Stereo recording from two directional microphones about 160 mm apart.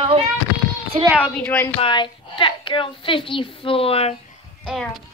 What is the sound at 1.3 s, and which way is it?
Speech, 10° left (ahead or behind).